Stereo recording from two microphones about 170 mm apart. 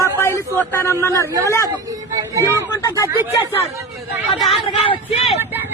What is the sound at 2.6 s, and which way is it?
Speech, 20° left (ahead or behind).